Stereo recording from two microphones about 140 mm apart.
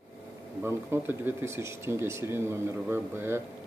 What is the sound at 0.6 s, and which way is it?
Speech, 15° right (ahead or behind).